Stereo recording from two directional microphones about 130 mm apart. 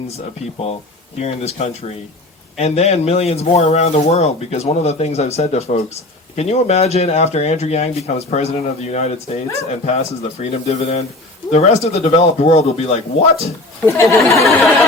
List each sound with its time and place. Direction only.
1.2 s speech: 55° left (ahead or behind)
13.8 s speech: 20° left (ahead or behind)
14.4 s chatter: centre (ahead or behind)